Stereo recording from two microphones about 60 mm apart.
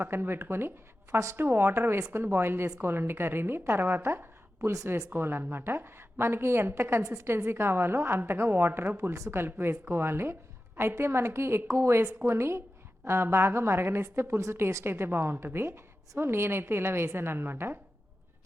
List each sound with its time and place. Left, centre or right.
0.0 s a woman's voice: right
7.0 s a woman's voice: right
14.8 s a woman's voice: right